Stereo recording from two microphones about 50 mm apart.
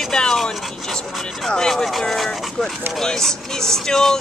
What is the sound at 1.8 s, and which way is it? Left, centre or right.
Speech, centre.